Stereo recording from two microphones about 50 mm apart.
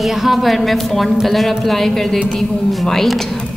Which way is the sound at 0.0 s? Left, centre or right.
Centre.